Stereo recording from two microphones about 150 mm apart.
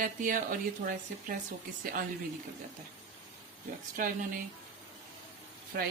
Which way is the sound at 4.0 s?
65° right (ahead or behind).